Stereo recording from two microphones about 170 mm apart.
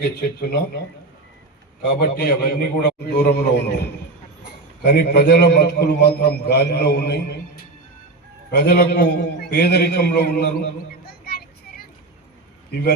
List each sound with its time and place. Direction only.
0.0 s a man's voice: 70° left (ahead or behind)
2.0 s a man's voice: 65° left (ahead or behind)
4.8 s a man's voice: 75° left (ahead or behind)